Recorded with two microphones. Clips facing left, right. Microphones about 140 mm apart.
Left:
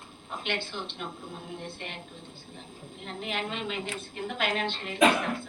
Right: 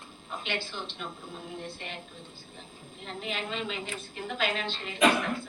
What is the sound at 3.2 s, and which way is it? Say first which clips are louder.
Speech: left 1 dB; 55° left (ahead or behind).